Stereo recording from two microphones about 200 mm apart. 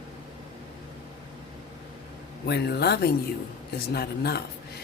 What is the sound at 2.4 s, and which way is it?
Speech, 55° left (ahead or behind).